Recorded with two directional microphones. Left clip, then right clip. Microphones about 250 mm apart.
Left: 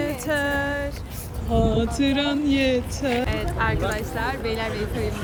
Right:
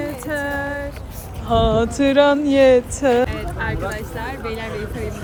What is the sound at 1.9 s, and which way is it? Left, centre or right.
Speech, centre.